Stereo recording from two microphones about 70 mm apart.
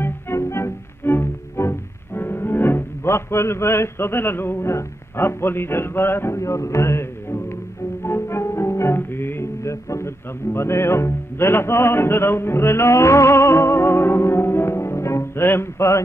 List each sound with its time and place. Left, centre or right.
0.0 s music: left